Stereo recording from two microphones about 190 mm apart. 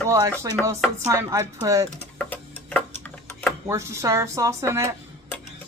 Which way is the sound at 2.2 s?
10° left (ahead or behind).